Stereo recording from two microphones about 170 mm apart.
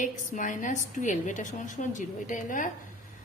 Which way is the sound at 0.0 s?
50° left (ahead or behind).